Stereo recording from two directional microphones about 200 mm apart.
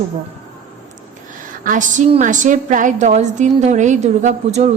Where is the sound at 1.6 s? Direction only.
40° right (ahead or behind).